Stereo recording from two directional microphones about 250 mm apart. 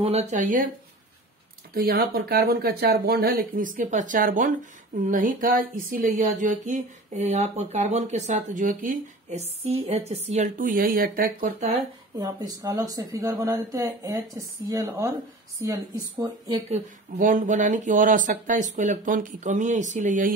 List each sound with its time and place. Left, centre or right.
0.0 s speech: right
1.7 s speech: right
12.2 s speech: centre; by 20.3 s right